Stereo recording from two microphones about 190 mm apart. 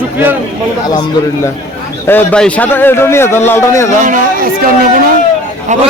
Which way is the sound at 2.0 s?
5° left (ahead or behind).